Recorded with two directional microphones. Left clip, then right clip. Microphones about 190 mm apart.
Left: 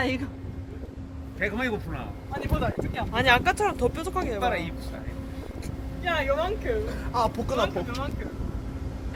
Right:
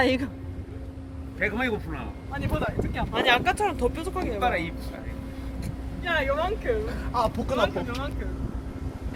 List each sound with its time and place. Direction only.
0.0 s a man's voice: 50° right (ahead or behind)
1.4 s speech: 25° left (ahead or behind)
3.1 s speech: 10° left (ahead or behind)
4.4 s speech: 35° left (ahead or behind)
6.1 s speech: 15° left (ahead or behind)
7.5 s speech: centre (ahead or behind)